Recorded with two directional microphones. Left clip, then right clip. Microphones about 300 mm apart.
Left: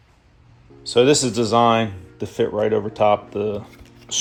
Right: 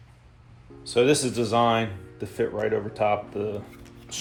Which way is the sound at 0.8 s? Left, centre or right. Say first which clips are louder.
Left 5 dB; left.